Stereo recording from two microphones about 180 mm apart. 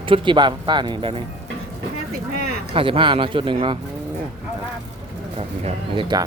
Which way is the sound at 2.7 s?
30° right (ahead or behind).